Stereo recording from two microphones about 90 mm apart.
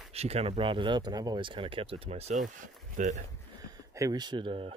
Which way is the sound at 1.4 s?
70° right (ahead or behind).